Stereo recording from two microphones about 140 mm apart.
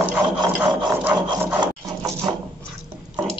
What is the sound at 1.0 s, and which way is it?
Wood, 15° right (ahead or behind).